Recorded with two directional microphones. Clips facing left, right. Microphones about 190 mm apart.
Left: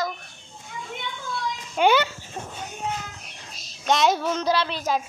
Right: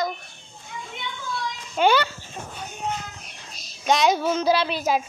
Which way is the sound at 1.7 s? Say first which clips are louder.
Even; 15° left (ahead or behind).